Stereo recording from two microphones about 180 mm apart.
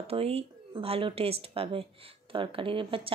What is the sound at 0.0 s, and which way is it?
Speech, 35° right (ahead or behind).